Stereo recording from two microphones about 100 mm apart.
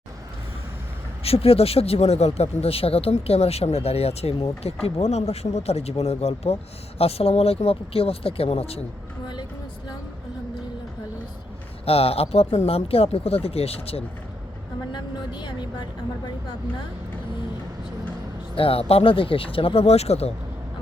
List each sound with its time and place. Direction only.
1.2 s speech: 80° left
9.2 s vehicle: 45° left (ahead or behind)
11.9 s speech: 80° left
14.9 s speech: 50° left (ahead or behind)
18.5 s speech: 70° left (ahead or behind); by 20.3 s 90° left